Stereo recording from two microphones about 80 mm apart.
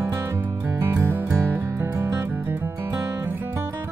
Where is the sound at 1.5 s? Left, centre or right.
Right.